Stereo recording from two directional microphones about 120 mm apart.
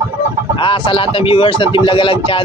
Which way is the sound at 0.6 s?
45° left (ahead or behind).